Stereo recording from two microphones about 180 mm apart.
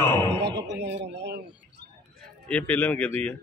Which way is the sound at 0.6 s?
75° right (ahead or behind).